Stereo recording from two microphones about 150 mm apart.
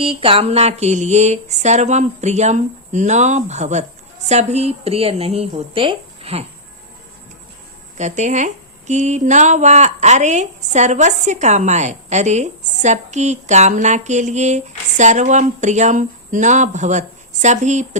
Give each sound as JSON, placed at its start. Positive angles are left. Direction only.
{"t": 0.0, "sound": "speech", "side_deg": -40}
{"t": 7.9, "sound": "speech", "side_deg": -50}